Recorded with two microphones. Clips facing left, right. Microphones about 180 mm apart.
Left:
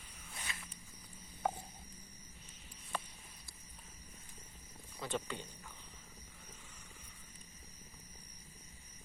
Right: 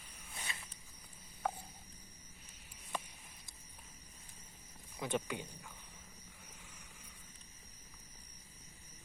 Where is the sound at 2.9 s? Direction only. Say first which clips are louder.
Even; 15° right (ahead or behind).